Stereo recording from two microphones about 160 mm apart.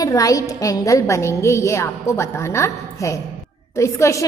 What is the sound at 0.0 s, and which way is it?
A woman's voice, 20° left (ahead or behind).